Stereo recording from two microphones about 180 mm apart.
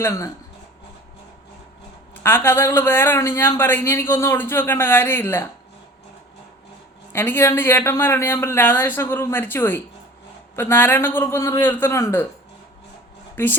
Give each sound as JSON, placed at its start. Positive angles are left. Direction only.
{"t": 0.0, "sound": "a man's voice", "side_deg": 15}
{"t": 2.2, "sound": "a man's voice", "side_deg": 10}
{"t": 7.1, "sound": "a man's voice", "side_deg": 10}
{"t": 13.3, "sound": "speech", "side_deg": 10}